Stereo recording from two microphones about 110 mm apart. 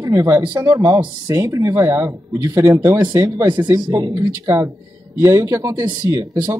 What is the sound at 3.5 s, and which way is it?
A man's voice, 40° right (ahead or behind).